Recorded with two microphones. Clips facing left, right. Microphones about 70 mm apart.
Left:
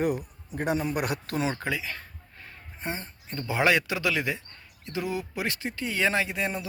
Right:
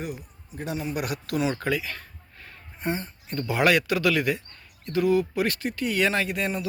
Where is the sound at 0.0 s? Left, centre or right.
Left.